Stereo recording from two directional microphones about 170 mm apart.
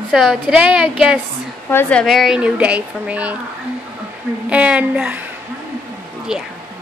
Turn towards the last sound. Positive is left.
turn(degrees=-5)  # may be behind; listen again after turning